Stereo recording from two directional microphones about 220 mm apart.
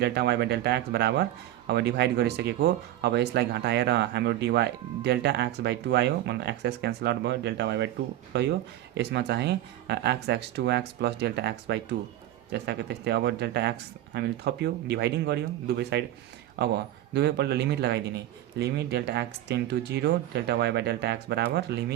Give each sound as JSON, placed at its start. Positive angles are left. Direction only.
{"t": 0.0, "sound": "speech", "side_deg": -50}